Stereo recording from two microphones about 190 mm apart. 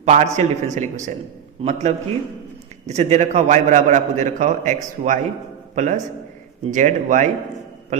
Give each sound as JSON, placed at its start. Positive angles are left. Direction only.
{"t": 0.0, "sound": "a man's voice", "side_deg": -35}